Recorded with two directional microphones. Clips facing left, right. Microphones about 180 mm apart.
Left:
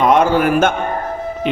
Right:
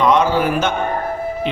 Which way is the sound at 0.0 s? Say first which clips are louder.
Left 2 dB; 50° left (ahead or behind).